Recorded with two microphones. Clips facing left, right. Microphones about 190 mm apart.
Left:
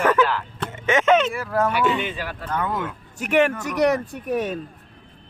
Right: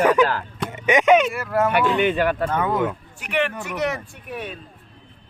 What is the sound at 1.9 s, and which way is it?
Speech, 60° right (ahead or behind).